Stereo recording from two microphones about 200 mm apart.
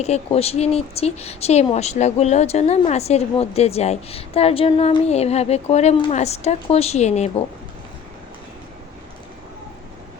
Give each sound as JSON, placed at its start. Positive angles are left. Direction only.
{"t": 0.0, "sound": "speech", "side_deg": 30}